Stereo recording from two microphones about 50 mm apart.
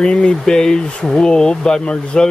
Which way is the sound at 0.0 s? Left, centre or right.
Centre.